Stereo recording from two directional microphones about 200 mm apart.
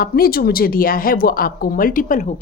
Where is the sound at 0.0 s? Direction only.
50° left (ahead or behind).